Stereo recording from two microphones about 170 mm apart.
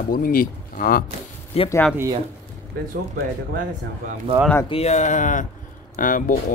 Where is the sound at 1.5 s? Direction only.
35° left (ahead or behind).